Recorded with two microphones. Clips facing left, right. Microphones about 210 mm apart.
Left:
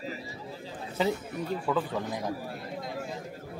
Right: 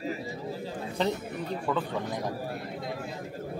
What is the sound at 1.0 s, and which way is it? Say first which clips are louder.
A man's voice: left 1 dB; 5° left (ahead or behind).